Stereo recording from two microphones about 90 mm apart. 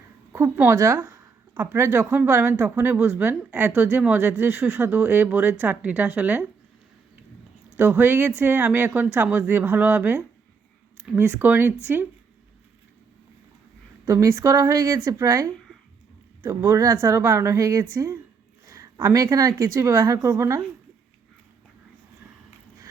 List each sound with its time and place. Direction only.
0.5 s speech: 20° right (ahead or behind)
7.8 s speech: 20° right (ahead or behind)
14.1 s speech: 35° right (ahead or behind)
18.6 s a sound: 40° right (ahead or behind)
19.0 s speech: 40° right (ahead or behind)